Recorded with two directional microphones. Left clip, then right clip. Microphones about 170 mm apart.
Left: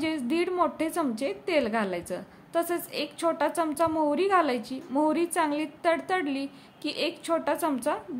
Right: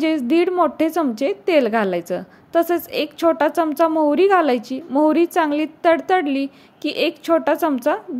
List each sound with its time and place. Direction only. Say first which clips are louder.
0.0 s a woman's voice: right 10 dB; 35° right (ahead or behind)